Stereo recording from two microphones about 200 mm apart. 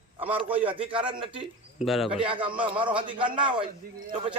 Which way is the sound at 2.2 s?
25° right (ahead or behind).